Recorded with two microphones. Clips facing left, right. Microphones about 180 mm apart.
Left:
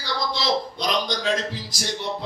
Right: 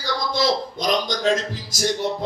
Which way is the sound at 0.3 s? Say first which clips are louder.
Right 4 dB; 45° right (ahead or behind).